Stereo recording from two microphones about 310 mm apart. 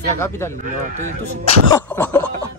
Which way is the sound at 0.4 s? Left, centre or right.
Centre.